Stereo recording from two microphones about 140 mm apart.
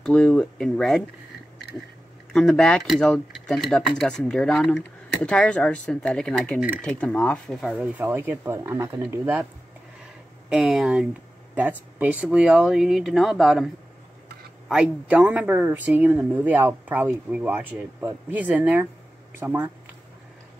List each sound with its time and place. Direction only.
0.0 s speech: 5° left (ahead or behind)
2.3 s speech: 5° left (ahead or behind)
7.7 s speech: 15° right (ahead or behind)
10.5 s speech: 5° right (ahead or behind)
14.7 s speech: 5° right (ahead or behind)